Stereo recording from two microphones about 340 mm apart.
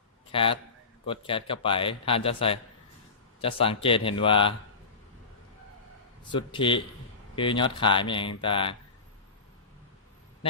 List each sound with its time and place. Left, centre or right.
0.3 s a man's voice: centre
6.3 s a man's voice: centre